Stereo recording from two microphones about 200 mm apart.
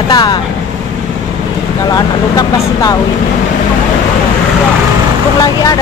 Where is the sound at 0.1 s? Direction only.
20° left (ahead or behind).